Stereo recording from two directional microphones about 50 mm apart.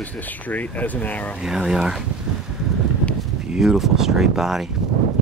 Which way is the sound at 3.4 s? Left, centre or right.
Centre.